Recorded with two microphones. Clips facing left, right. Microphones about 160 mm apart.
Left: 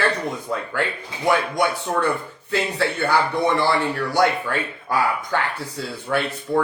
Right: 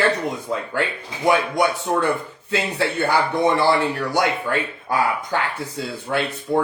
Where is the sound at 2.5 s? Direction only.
20° right (ahead or behind).